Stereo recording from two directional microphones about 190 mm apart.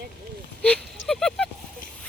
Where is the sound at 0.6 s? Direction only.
5° left (ahead or behind).